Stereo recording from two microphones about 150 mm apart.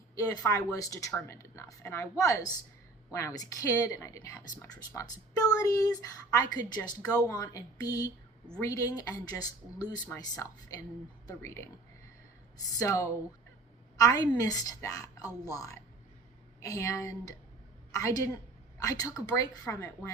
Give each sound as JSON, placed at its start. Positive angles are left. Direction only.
{"t": 0.2, "sound": "a woman's voice", "side_deg": 25}
{"t": 12.8, "sound": "a woman's voice", "side_deg": 20}